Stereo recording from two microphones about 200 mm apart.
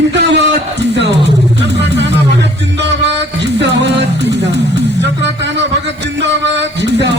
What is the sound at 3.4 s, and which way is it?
Speech, 60° right (ahead or behind).